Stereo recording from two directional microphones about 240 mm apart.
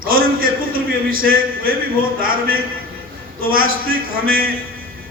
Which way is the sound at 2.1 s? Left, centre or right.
Right.